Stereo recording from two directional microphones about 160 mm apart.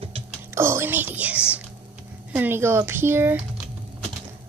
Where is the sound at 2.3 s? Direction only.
15° right (ahead or behind).